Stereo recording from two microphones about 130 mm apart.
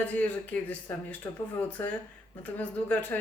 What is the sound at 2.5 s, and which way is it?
Speech, 15° left (ahead or behind).